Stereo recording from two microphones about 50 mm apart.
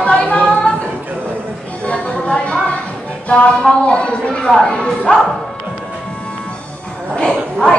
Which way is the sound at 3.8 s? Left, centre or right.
Centre.